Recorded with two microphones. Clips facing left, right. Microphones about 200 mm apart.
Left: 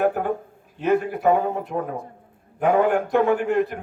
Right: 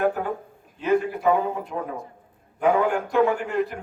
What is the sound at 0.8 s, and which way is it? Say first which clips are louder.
A man's voice: left 1 dB; 55° left (ahead or behind).